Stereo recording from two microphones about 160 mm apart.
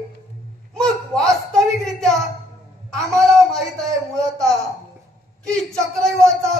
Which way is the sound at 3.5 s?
5° left (ahead or behind).